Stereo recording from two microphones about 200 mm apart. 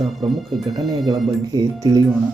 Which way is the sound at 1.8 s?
20° right (ahead or behind).